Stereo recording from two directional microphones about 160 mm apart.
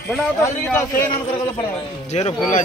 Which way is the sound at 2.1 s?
40° left (ahead or behind).